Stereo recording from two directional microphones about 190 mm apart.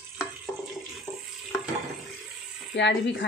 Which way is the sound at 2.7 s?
70° left (ahead or behind).